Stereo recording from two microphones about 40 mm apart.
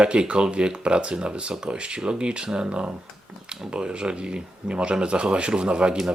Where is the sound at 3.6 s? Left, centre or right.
Right.